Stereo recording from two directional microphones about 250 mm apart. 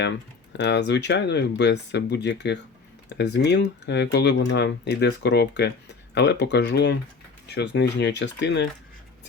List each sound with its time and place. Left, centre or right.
0.5 s speech: left